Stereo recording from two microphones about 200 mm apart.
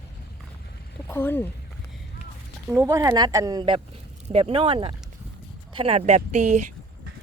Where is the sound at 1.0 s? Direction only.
10° left (ahead or behind).